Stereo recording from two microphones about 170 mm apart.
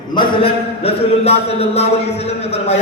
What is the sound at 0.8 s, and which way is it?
Speech, 35° left (ahead or behind).